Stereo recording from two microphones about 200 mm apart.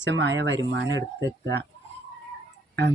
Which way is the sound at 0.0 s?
65° right (ahead or behind).